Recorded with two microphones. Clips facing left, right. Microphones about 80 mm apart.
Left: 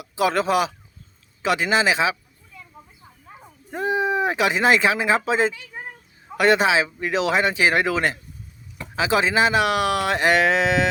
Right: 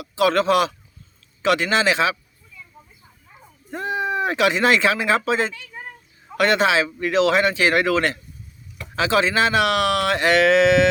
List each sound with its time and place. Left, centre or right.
0.2 s speech: centre
3.7 s speech: centre